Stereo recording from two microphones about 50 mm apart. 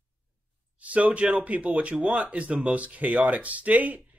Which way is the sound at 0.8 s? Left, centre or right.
Right.